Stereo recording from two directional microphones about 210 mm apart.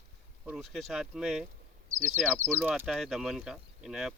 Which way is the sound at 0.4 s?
Centre (ahead or behind).